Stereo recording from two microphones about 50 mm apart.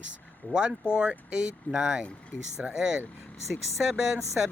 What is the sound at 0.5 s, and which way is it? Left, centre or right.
Speech, centre.